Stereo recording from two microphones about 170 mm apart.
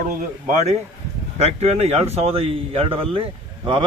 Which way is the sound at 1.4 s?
40° right (ahead or behind).